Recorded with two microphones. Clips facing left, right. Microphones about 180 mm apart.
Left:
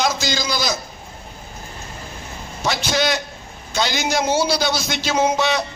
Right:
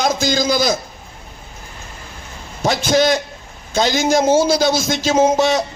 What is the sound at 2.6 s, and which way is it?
A man's voice, 50° right (ahead or behind).